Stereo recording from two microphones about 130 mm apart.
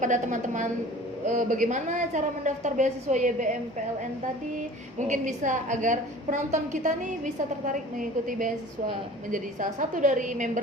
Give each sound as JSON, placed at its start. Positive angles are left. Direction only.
{"t": 0.0, "sound": "a woman's voice", "side_deg": -70}
{"t": 1.3, "sound": "a woman's voice", "side_deg": -85}
{"t": 4.5, "sound": "a woman's voice", "side_deg": -70}